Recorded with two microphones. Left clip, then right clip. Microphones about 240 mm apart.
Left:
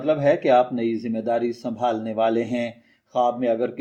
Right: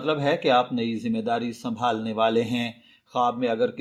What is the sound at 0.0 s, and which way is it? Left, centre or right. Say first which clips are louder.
Speech: left 4 dB; right.